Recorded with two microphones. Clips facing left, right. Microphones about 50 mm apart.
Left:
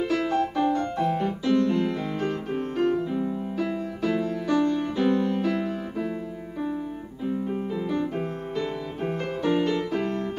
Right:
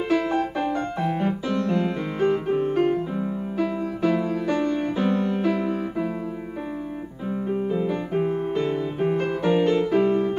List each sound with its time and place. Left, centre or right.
0.1 s music: right
0.7 s piano: centre
1.8 s music: right
7.2 s music: right